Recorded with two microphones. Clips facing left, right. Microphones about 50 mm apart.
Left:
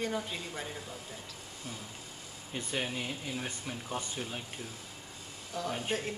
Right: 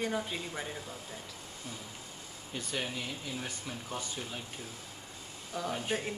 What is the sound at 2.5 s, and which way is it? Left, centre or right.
Speech, centre.